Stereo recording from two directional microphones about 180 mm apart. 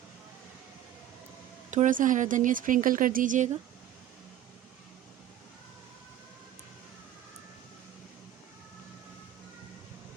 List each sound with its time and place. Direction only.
1.7 s speech: 45° right (ahead or behind)